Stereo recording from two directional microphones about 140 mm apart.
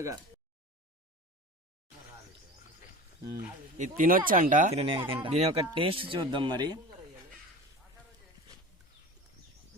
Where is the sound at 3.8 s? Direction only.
65° right (ahead or behind).